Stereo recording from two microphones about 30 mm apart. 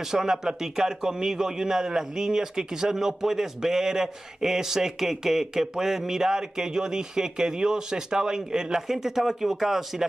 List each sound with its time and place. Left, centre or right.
0.1 s a man's voice: centre